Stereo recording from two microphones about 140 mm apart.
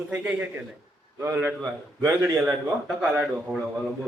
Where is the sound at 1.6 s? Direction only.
30° right (ahead or behind).